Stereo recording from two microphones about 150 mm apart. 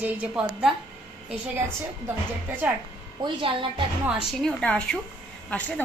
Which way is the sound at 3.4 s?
35° right (ahead or behind).